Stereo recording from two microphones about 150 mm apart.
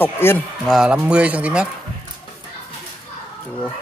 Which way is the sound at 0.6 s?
5° right (ahead or behind).